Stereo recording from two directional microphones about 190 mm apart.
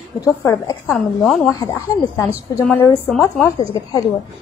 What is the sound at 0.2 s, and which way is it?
Speech, 15° left (ahead or behind).